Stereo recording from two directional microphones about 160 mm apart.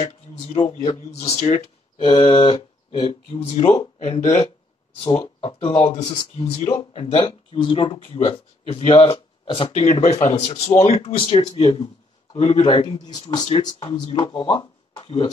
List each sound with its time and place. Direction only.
0.8 s speech: 40° left (ahead or behind)
2.0 s speech: 30° left (ahead or behind)
5.2 s a man's voice: 30° left (ahead or behind)